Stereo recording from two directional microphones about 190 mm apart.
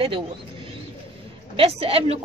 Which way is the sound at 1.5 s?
30° right (ahead or behind).